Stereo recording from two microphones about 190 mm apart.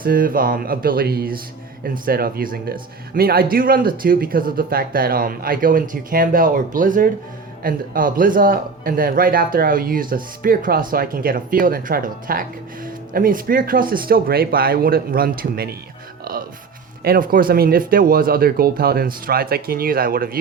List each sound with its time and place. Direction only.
0.0 s a man's voice: 50° right (ahead or behind)
16.3 s music: 50° right (ahead or behind)
17.0 s a man's voice: 50° right (ahead or behind)